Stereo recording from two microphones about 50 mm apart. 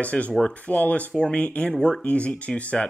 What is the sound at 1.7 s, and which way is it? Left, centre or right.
Speech, centre.